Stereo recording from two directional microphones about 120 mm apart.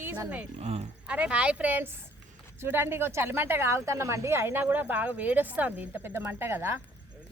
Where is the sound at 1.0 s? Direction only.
10° right (ahead or behind).